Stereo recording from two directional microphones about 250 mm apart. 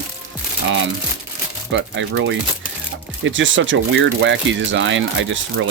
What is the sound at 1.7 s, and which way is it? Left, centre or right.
Speech, right.